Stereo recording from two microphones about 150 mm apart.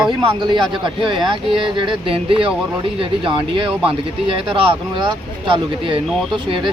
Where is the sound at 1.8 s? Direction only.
35° right (ahead or behind).